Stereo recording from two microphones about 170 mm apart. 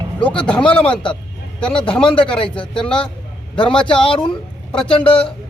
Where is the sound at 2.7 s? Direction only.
5° left (ahead or behind).